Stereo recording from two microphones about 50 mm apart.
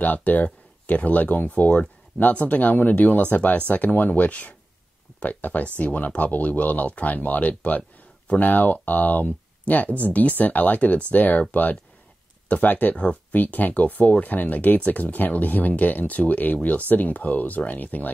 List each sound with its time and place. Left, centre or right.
0.0 s speech: left
12.9 s speech: left
13.3 s speech: left